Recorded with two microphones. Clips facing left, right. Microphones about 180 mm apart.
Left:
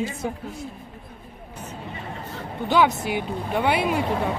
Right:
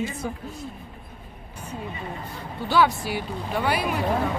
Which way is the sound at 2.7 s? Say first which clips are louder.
Left 1 dB; 20° left (ahead or behind).